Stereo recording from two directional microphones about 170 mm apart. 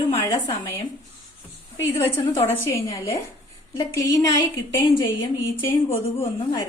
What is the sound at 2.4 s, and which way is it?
A woman's voice, 15° left (ahead or behind).